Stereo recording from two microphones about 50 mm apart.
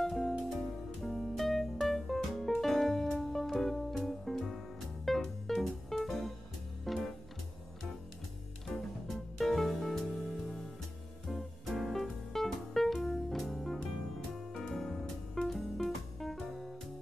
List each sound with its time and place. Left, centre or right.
0.0 s music: centre
8.6 s music: centre
11.2 s music: centre